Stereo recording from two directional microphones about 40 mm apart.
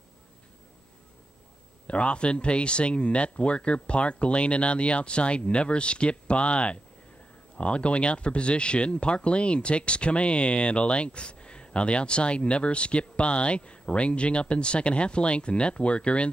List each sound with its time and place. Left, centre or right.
1.9 s speech: left